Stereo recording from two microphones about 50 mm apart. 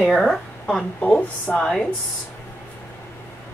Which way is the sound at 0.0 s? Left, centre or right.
Centre.